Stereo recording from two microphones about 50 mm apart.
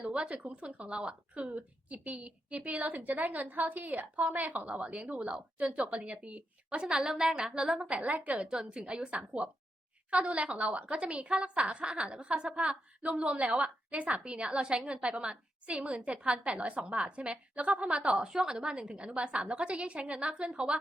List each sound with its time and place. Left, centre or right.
0.1 s a woman's voice: right
8.1 s a woman's voice: right
8.4 s a woman's voice: centre
18.3 s a woman's voice: centre